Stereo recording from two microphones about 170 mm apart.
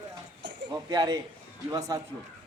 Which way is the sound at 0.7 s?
20° right (ahead or behind).